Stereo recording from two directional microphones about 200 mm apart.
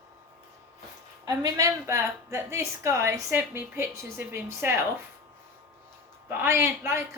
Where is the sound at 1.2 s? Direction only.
20° right (ahead or behind).